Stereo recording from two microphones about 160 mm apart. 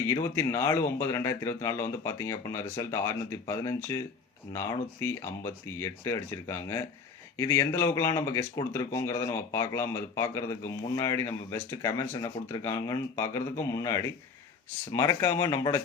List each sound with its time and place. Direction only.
0.1 s speech: 20° left (ahead or behind)